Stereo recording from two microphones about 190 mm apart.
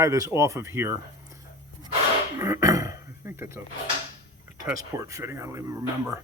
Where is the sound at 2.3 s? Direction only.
15° right (ahead or behind).